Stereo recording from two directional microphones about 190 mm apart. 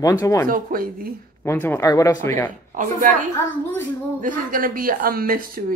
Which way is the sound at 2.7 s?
40° right (ahead or behind).